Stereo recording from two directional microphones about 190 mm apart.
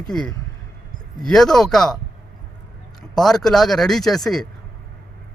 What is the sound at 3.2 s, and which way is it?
A man's voice, centre (ahead or behind).